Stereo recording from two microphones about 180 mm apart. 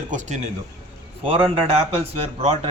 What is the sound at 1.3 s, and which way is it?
Speech, 30° right (ahead or behind).